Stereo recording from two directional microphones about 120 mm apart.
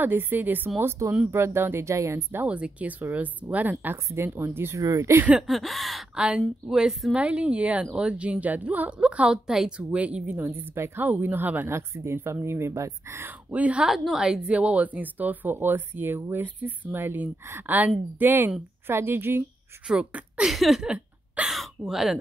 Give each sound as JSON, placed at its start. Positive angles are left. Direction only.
{"t": 0.0, "sound": "speech", "side_deg": -15}
{"t": 5.5, "sound": "a woman's voice", "side_deg": 0}